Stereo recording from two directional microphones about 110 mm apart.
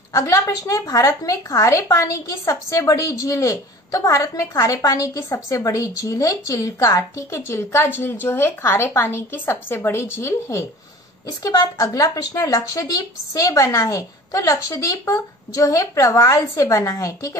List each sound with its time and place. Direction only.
0.1 s a woman's voice: 30° left (ahead or behind)
11.2 s a woman's voice: 35° left (ahead or behind)